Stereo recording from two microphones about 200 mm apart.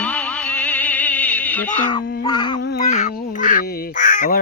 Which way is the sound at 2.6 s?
55° left (ahead or behind).